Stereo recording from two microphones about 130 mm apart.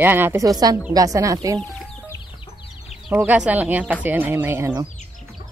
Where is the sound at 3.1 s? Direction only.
10° right (ahead or behind).